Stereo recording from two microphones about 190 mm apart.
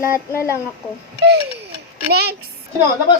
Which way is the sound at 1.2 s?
60° right (ahead or behind).